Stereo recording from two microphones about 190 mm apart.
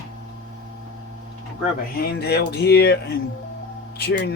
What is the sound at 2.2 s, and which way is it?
Speech, 60° left (ahead or behind).